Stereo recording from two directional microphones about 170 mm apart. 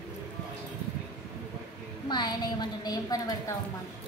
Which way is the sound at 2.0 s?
25° left (ahead or behind).